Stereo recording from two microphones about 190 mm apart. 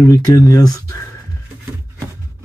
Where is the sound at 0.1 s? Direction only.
20° left (ahead or behind).